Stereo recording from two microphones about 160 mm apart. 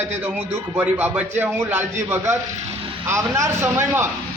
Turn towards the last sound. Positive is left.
turn(degrees=-15)  # may be behind; listen again after turning